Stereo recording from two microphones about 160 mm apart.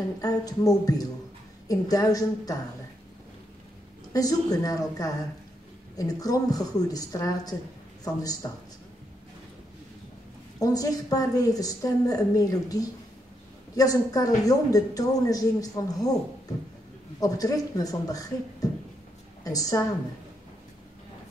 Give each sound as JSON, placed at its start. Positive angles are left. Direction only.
{"t": 0.2, "sound": "a woman's voice", "side_deg": 20}
{"t": 4.1, "sound": "a woman's voice", "side_deg": 25}
{"t": 10.6, "sound": "a woman's voice", "side_deg": 20}